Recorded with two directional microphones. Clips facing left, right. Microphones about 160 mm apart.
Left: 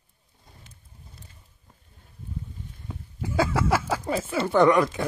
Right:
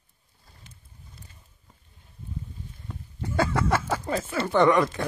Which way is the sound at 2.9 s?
5° left (ahead or behind).